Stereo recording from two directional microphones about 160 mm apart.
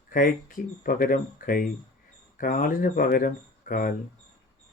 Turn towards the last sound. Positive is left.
turn(degrees=60)  # may be behind; listen again after turning